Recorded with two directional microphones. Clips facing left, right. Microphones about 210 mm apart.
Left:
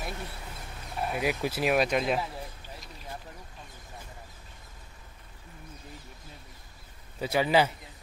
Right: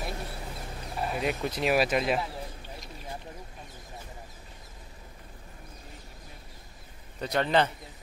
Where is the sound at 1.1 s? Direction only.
5° left (ahead or behind).